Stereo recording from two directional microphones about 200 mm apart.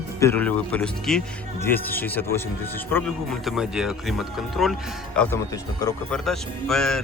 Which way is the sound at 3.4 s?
Centre (ahead or behind).